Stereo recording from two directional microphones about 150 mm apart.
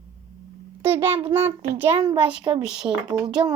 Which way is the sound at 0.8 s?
15° right (ahead or behind).